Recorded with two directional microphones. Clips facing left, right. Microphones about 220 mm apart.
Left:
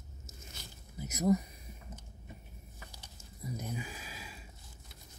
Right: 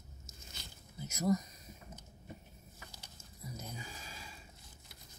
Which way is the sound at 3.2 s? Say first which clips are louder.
Left 6 dB; 15° left (ahead or behind).